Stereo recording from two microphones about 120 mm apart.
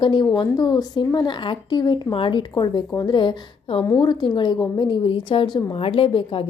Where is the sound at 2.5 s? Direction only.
35° left (ahead or behind).